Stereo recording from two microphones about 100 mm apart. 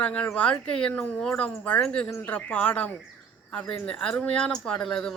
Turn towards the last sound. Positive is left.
turn(degrees=5)  # may be behind; listen again after turning